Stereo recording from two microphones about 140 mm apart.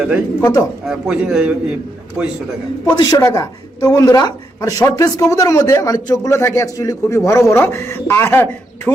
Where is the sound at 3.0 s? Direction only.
25° left (ahead or behind).